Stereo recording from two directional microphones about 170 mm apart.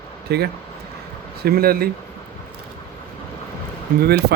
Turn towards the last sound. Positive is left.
turn(degrees=-70)  # may be behind; listen again after turning